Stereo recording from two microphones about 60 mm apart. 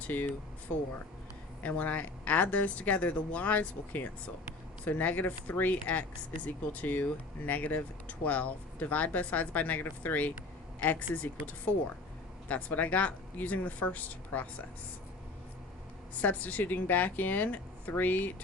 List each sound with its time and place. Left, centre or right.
0.1 s speech: left
1.6 s speech: left
16.1 s speech: left